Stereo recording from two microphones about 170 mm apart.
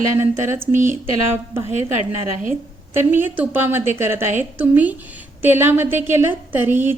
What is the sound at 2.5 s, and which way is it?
A woman's voice, 10° right (ahead or behind).